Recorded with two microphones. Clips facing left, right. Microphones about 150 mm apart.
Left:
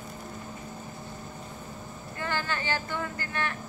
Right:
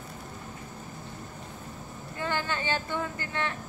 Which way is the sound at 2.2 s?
20° right (ahead or behind).